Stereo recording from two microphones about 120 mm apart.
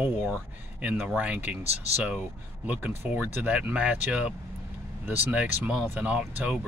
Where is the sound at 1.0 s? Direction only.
10° right (ahead or behind).